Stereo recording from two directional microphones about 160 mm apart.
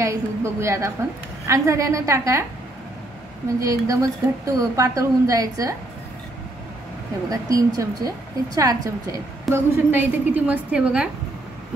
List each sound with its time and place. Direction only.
0.0 s a woman's voice: 20° right (ahead or behind)
3.5 s a woman's voice: 20° right (ahead or behind)
7.2 s a woman's voice: 20° right (ahead or behind)